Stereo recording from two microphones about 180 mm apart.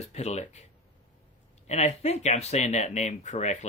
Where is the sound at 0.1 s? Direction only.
35° left (ahead or behind).